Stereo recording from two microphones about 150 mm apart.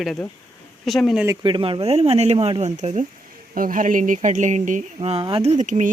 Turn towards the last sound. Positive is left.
turn(degrees=-55)  # may be behind; listen again after turning